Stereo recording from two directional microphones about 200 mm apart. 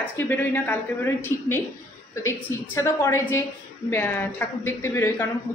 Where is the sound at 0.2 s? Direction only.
10° left (ahead or behind).